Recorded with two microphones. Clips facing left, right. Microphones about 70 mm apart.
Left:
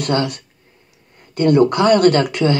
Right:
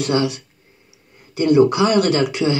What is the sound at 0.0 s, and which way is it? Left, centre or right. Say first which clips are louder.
Speech: even; left.